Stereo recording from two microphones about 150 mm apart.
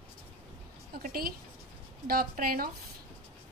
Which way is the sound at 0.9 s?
75° right (ahead or behind).